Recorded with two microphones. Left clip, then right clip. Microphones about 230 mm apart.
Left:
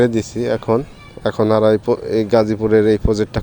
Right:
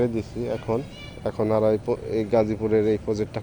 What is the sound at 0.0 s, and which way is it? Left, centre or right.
Speech, left.